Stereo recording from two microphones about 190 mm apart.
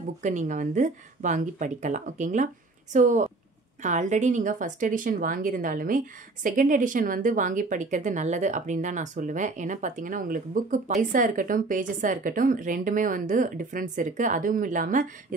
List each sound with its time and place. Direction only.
0.2 s a woman's voice: 40° right (ahead or behind)